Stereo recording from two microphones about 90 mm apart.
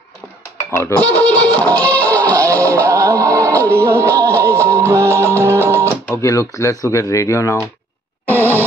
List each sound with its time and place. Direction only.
0.7 s speech: 35° left (ahead or behind)
1.0 s music: 15° left (ahead or behind)
2.3 s music: 35° right (ahead or behind)
4.1 s music: 20° left (ahead or behind)
4.6 s music: 30° right (ahead or behind)
6.2 s speech: 35° left (ahead or behind)
8.3 s a sound: 25° right (ahead or behind)